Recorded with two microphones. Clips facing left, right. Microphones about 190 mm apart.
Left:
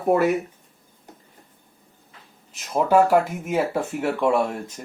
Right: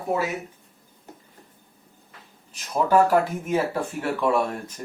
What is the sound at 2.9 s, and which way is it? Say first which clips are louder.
Speech: left 2 dB; 10° left (ahead or behind).